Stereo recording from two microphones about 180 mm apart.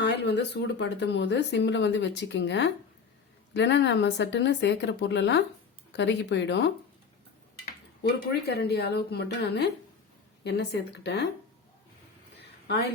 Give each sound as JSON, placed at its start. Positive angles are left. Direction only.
{"t": 0.0, "sound": "speech", "side_deg": 70}
{"t": 8.0, "sound": "a woman's voice", "side_deg": 65}